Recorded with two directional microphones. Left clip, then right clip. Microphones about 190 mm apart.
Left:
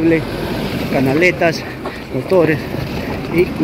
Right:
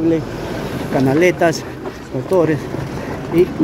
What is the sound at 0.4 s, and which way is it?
Vehicle, 50° left (ahead or behind).